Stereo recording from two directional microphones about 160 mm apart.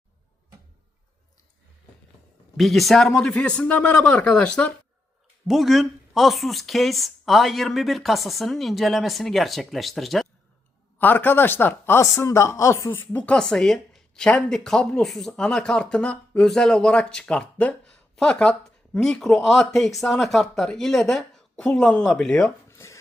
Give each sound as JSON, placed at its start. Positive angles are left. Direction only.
{"t": 2.6, "sound": "speech", "side_deg": 0}
{"t": 10.9, "sound": "speech", "side_deg": 10}
{"t": 22.7, "sound": "a sound", "side_deg": 15}